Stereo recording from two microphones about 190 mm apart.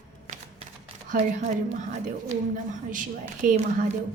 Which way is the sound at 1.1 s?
35° right (ahead or behind).